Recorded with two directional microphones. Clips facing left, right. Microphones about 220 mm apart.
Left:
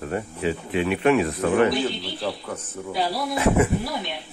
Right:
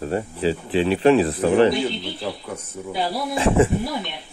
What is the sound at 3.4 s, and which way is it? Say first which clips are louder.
Speech: right 2 dB; 30° right (ahead or behind).